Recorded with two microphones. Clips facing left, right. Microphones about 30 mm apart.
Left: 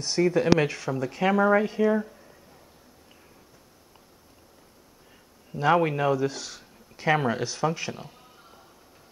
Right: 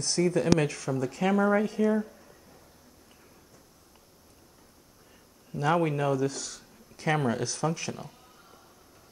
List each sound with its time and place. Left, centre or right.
0.0 s speech: centre
5.5 s speech: centre